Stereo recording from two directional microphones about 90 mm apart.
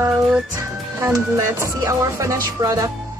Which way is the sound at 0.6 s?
30° right (ahead or behind).